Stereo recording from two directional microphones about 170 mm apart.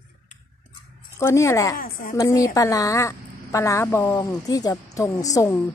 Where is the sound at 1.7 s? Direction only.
55° left (ahead or behind).